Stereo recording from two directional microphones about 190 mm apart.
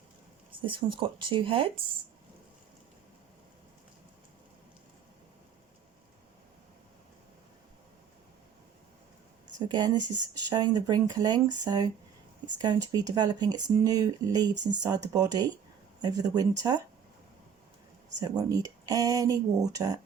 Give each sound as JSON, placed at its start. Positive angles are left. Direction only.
{"t": 0.6, "sound": "speech", "side_deg": -25}
{"t": 9.6, "sound": "speech", "side_deg": -20}
{"t": 18.2, "sound": "speech", "side_deg": -20}